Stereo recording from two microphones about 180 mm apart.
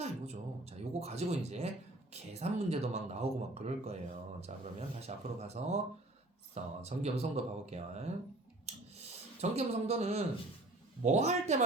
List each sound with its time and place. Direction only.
0.0 s a sound: 35° right (ahead or behind)
2.1 s speech: 40° right (ahead or behind)
9.4 s speech: 35° right (ahead or behind)